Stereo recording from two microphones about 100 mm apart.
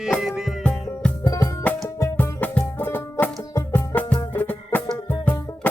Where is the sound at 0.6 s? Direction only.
10° left (ahead or behind).